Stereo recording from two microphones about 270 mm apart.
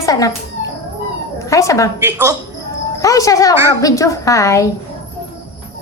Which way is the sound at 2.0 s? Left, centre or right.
Centre.